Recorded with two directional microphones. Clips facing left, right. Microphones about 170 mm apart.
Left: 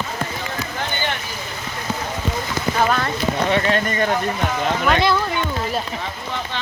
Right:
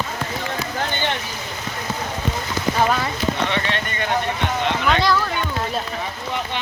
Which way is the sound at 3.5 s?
40° left (ahead or behind).